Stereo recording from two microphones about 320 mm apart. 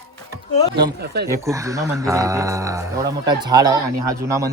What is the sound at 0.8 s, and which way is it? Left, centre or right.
Speech, right.